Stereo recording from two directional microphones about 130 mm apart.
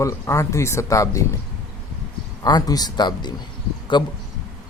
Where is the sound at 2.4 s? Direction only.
30° left (ahead or behind).